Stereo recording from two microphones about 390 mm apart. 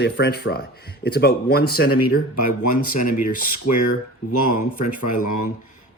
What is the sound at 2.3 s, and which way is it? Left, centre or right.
Speech, left.